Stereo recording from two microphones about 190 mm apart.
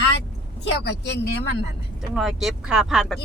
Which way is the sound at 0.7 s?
65° left (ahead or behind).